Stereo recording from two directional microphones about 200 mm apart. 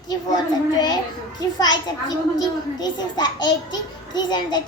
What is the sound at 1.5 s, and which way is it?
A child's voice, 20° left (ahead or behind).